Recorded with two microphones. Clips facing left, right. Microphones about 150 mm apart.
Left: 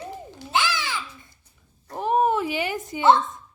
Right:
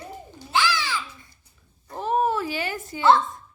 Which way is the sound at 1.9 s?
15° left (ahead or behind).